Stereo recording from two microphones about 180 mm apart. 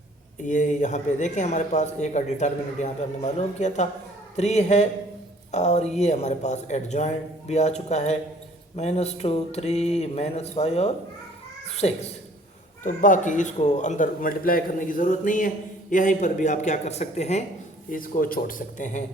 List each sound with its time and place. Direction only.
0.4 s speech: 45° left (ahead or behind)
11.6 s cat: 35° left (ahead or behind)
12.8 s speech: 45° left (ahead or behind)
17.9 s speech: 50° left (ahead or behind)